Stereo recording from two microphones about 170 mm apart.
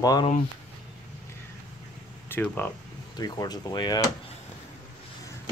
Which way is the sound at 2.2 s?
10° left (ahead or behind).